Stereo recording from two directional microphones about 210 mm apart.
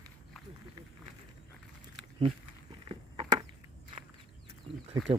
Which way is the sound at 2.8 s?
20° right (ahead or behind).